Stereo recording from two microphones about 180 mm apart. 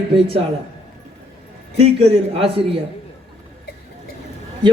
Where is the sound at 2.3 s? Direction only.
30° right (ahead or behind).